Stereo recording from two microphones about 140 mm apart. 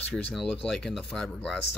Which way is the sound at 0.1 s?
Centre (ahead or behind).